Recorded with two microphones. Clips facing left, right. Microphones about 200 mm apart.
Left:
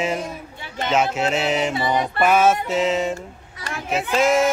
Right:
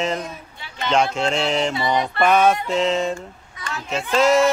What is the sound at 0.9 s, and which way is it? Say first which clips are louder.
Music: right 1 dB; 5° left (ahead or behind).